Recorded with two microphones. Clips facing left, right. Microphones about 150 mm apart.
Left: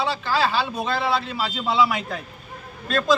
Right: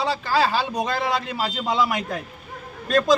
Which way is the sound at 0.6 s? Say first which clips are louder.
Right 2 dB; 15° right (ahead or behind).